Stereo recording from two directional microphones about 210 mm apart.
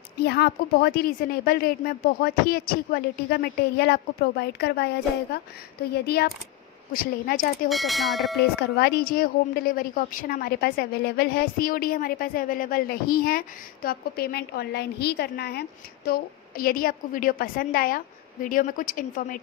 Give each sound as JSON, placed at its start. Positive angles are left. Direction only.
{"t": 0.2, "sound": "a woman's voice", "side_deg": 50}
{"t": 7.7, "sound": "speech", "side_deg": 0}
{"t": 8.4, "sound": "a woman's voice", "side_deg": 50}